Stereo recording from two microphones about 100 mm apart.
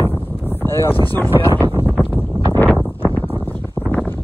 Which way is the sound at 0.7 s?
25° left (ahead or behind).